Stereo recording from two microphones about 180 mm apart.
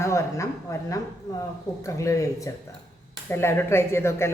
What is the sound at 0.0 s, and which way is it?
A woman's voice, 15° left (ahead or behind).